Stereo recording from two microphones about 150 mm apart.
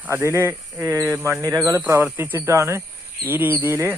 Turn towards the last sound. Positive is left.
turn(degrees=-15)  # may be behind; listen again after turning